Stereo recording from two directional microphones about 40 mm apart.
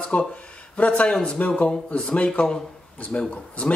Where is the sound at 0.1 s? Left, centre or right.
Left.